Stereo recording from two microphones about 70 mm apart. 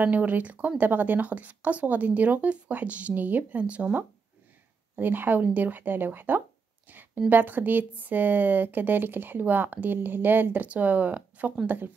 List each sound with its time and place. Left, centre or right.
0.0 s speech: right